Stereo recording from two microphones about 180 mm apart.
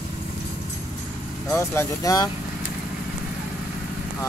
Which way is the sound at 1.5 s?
15° left (ahead or behind).